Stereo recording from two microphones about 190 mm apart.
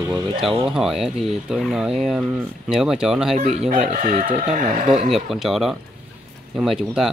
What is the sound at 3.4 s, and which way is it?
Speech, 40° right (ahead or behind).